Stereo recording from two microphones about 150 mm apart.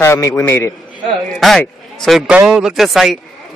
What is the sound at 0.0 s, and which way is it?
Speech, 20° left (ahead or behind).